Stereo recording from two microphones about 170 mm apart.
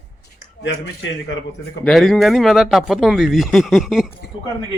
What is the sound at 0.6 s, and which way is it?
Speech, 90° left.